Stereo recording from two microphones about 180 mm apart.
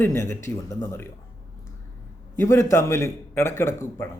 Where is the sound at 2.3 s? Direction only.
15° left (ahead or behind).